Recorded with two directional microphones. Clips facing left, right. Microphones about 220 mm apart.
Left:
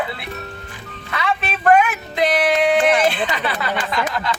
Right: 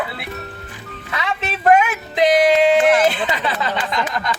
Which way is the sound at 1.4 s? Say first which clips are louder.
Right 1 dB; 20° right (ahead or behind).